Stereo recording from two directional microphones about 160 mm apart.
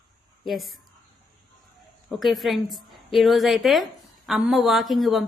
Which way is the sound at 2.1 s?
Centre (ahead or behind).